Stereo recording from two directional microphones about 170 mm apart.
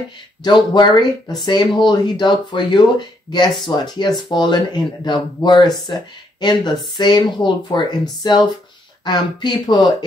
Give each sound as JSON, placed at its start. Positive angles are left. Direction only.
{"t": 0.4, "sound": "speech", "side_deg": 25}